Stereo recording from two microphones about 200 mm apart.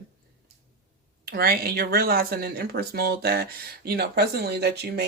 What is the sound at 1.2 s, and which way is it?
Speech, 45° right (ahead or behind).